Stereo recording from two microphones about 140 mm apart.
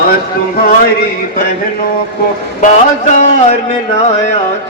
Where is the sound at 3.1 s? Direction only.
60° left (ahead or behind).